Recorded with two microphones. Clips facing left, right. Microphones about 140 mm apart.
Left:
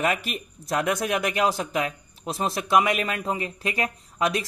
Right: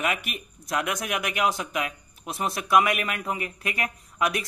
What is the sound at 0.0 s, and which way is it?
A man's voice, 35° left (ahead or behind).